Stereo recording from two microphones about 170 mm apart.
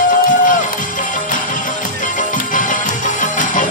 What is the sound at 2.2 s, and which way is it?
Music, 50° left (ahead or behind).